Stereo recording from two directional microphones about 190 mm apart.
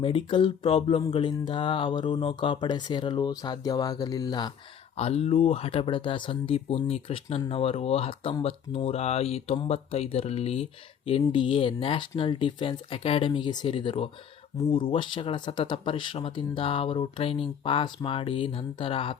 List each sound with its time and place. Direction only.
0.0 s speech: 25° left (ahead or behind)